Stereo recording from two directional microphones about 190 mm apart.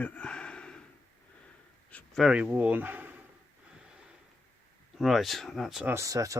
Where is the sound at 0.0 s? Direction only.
5° left (ahead or behind).